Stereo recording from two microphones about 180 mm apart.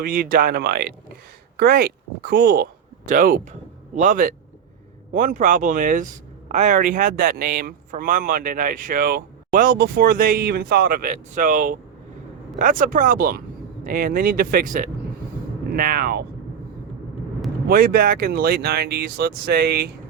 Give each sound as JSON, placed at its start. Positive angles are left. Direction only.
{"t": 0.0, "sound": "speech", "side_deg": -55}
{"t": 17.7, "sound": "speech", "side_deg": -55}